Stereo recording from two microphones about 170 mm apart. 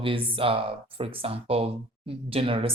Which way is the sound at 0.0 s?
30° right (ahead or behind).